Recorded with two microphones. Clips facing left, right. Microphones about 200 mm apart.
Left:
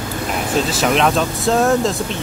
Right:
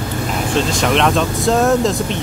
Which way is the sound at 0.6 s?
5° left (ahead or behind).